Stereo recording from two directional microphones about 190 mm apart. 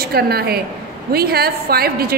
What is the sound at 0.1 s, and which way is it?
A woman's voice, 55° right (ahead or behind).